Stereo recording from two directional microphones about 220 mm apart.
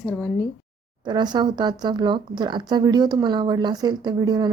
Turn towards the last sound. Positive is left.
turn(degrees=-20)  # may be behind; listen again after turning